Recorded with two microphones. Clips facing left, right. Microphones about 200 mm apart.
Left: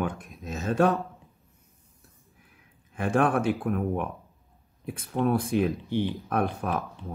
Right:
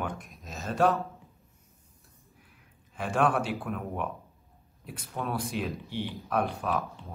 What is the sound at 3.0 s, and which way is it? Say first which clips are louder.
Speech: left 3 dB; 55° left (ahead or behind).